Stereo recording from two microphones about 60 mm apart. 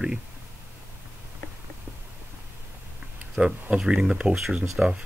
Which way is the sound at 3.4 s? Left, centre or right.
Centre.